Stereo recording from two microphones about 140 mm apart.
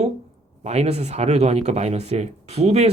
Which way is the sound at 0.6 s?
50° right (ahead or behind).